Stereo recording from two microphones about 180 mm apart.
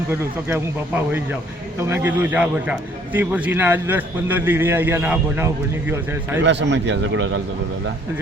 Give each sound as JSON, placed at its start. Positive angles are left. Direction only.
{"t": 0.1, "sound": "a man's voice", "side_deg": -10}
{"t": 6.4, "sound": "a man's voice", "side_deg": -80}